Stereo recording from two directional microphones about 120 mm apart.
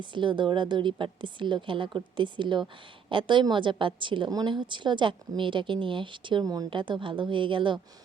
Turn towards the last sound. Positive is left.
turn(degrees=-45)  # may be behind; listen again after turning